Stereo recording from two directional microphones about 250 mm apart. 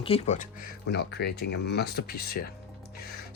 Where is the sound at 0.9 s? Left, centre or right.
Left.